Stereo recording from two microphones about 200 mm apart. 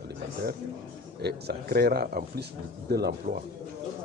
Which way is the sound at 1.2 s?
50° right (ahead or behind).